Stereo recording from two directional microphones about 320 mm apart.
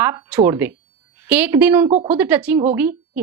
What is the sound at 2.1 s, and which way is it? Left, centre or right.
Speech, centre.